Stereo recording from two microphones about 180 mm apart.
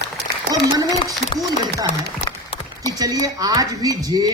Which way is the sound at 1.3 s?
30° left (ahead or behind).